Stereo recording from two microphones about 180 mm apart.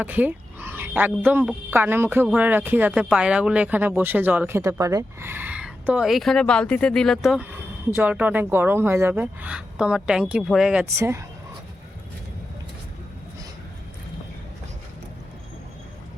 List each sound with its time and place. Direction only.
0.0 s speech: 10° right (ahead or behind)
10.9 s speech: 15° right (ahead or behind)